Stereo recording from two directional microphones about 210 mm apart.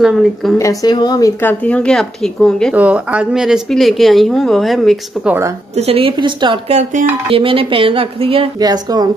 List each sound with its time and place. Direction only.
0.0 s speech: centre (ahead or behind)
0.6 s speech: 15° left (ahead or behind); by 5.5 s 5° right (ahead or behind)
5.8 s speech: 25° right (ahead or behind)